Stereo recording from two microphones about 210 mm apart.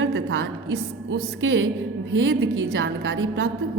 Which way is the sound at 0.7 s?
85° right.